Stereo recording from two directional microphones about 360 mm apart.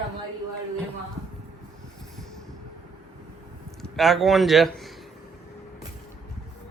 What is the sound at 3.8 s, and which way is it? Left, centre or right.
A woman's voice, centre.